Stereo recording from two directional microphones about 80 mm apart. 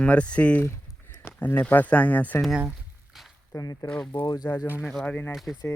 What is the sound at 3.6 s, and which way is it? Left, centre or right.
Speech, left.